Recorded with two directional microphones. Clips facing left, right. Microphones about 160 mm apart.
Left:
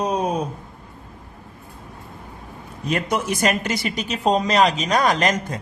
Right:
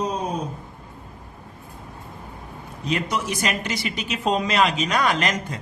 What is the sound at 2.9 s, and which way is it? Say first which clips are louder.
Speech: left 3 dB; 50° left (ahead or behind).